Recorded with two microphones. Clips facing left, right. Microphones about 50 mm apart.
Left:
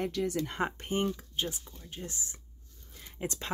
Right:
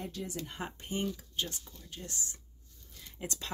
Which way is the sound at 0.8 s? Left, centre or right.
Left.